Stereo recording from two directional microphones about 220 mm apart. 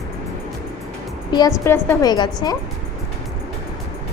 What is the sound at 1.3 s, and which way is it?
A woman's voice, 15° left (ahead or behind).